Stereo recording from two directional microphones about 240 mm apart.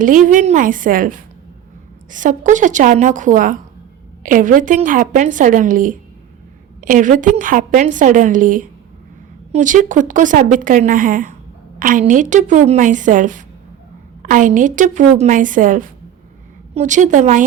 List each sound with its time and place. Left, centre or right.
0.0 s speech: right